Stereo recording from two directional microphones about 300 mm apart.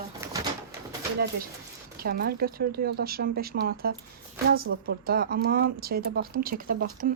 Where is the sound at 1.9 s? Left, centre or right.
Right.